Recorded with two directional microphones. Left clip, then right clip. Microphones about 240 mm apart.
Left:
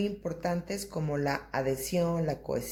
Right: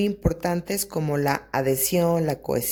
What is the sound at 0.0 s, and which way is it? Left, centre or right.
Speech, right.